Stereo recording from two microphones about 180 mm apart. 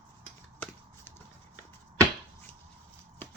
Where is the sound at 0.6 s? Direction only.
10° left (ahead or behind).